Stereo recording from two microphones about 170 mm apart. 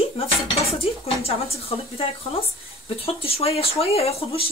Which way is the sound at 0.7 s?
35° left (ahead or behind).